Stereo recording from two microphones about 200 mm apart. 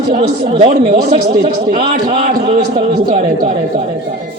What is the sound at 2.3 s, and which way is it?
A man's voice, 25° right (ahead or behind).